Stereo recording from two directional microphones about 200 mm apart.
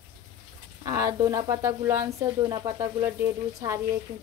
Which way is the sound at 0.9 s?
15° right (ahead or behind).